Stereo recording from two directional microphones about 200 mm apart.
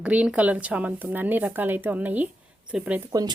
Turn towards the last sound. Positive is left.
turn(degrees=-20)  # may be behind; listen again after turning